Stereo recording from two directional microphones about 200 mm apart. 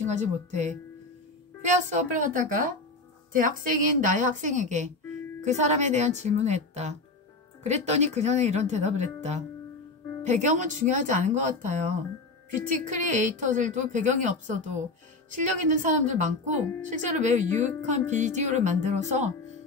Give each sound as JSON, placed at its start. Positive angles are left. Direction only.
{"t": 0.0, "sound": "a woman's voice", "side_deg": -35}